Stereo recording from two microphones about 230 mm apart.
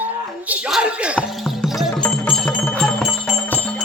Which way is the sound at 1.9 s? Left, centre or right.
Centre.